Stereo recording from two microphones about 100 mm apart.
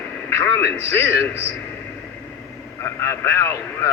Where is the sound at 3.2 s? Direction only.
25° left (ahead or behind).